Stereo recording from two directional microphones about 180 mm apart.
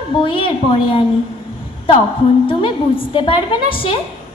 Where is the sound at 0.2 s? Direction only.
30° left (ahead or behind).